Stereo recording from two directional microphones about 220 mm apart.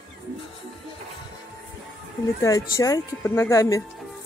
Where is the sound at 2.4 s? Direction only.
15° left (ahead or behind).